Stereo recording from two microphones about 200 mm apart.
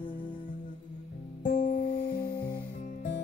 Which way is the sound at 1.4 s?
40° left (ahead or behind).